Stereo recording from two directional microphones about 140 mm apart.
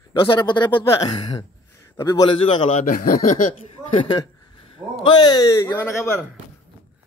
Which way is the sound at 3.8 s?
5° right (ahead or behind).